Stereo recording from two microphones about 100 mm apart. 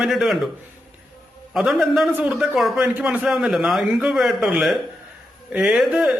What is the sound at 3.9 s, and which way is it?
Speech, 15° right (ahead or behind).